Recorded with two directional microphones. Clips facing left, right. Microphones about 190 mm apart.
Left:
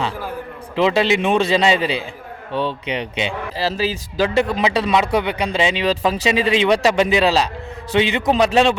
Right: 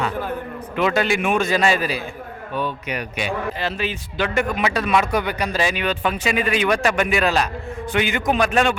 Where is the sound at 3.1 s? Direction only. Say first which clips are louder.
Left 1 dB; 25° left (ahead or behind).